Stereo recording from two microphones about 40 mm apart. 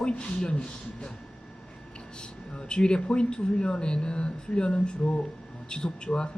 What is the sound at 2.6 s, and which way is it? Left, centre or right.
Speech, left.